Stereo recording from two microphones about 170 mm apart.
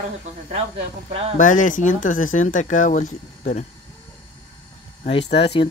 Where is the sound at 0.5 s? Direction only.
35° right (ahead or behind).